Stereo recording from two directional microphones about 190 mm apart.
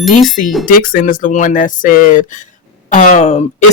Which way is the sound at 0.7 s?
45° left (ahead or behind).